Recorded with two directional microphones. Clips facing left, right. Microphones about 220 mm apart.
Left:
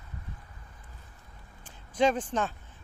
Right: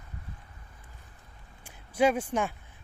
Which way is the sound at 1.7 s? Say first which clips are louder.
Right 1 dB; 10° right (ahead or behind).